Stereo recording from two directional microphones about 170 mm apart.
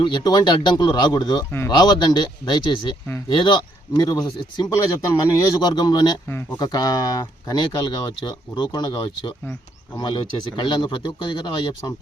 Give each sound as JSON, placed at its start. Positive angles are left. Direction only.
{"t": 0.0, "sound": "speech", "side_deg": 25}